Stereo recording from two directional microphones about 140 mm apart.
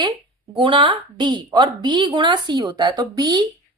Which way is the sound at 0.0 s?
30° right (ahead or behind).